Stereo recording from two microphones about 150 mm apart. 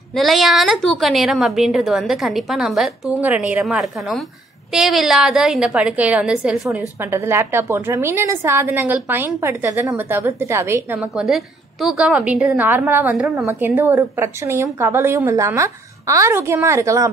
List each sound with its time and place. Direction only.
0.1 s a woman's voice: centre (ahead or behind)
7.0 s a woman's voice: 15° right (ahead or behind)
11.0 s a woman's voice: 5° right (ahead or behind); by 17.1 s 20° right (ahead or behind)